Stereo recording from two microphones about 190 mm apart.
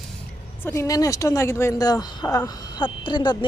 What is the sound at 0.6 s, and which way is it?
Speech, 15° left (ahead or behind).